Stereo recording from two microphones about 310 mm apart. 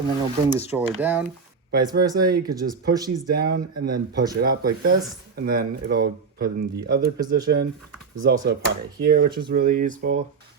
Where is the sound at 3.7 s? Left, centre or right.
Right.